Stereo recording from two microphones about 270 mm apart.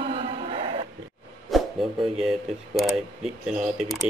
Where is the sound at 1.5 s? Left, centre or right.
Centre.